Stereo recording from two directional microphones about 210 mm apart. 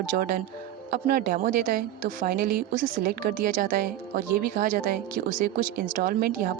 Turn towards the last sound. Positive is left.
turn(degrees=-45)  # may be behind; listen again after turning